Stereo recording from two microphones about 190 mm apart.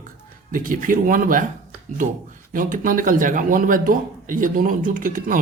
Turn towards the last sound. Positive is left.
turn(degrees=-45)  # may be behind; listen again after turning